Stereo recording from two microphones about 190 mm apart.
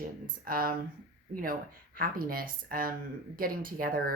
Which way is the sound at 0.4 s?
50° right (ahead or behind).